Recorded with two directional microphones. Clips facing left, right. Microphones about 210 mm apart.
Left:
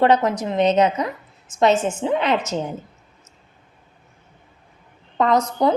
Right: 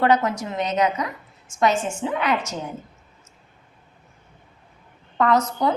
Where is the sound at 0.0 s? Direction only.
20° left (ahead or behind).